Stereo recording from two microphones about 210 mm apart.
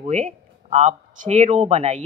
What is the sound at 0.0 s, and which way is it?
A woman's voice, 35° right (ahead or behind).